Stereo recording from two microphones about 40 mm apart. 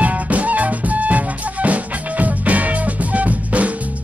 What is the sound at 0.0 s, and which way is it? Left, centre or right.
Music, right.